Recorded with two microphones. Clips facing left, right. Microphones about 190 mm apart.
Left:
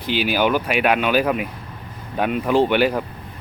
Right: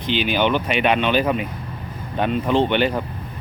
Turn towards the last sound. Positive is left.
turn(degrees=5)  # may be behind; listen again after turning